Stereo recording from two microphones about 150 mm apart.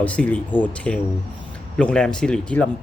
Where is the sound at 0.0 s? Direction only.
10° left (ahead or behind).